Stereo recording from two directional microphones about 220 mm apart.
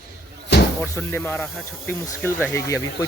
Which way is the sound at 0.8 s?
5° left (ahead or behind).